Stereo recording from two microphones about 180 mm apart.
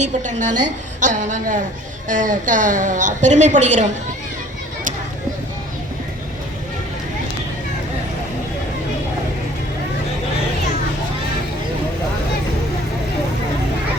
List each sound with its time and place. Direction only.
0.0 s a woman's voice: 45° right (ahead or behind)